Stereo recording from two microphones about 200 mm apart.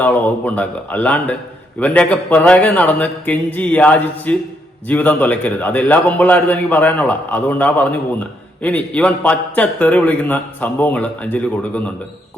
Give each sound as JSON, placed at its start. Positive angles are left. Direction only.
{"t": 0.0, "sound": "a man's voice", "side_deg": 10}